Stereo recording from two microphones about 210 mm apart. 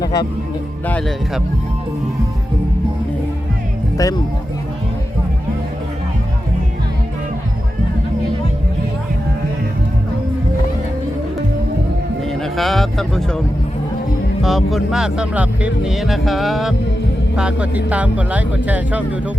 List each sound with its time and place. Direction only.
0.9 s speech: 5° left (ahead or behind)
3.9 s speech: 15° left (ahead or behind)
12.4 s speech: centre (ahead or behind)
14.4 s speech: centre (ahead or behind)